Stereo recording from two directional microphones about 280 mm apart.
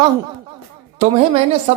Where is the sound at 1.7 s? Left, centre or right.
Right.